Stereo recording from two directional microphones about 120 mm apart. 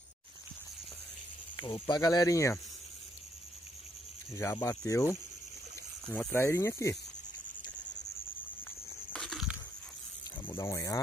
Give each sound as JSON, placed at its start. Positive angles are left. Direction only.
{"t": 1.6, "sound": "speech", "side_deg": 35}
{"t": 4.4, "sound": "speech", "side_deg": 25}
{"t": 9.1, "sound": "crushing", "side_deg": 5}
{"t": 10.5, "sound": "speech", "side_deg": 25}